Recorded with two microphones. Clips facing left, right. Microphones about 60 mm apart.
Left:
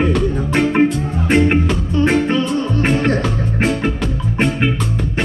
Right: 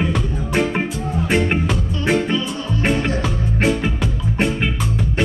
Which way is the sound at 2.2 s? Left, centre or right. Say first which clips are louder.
Left 5 dB; left.